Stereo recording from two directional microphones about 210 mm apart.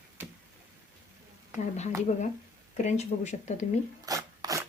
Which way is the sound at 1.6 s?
35° left (ahead or behind).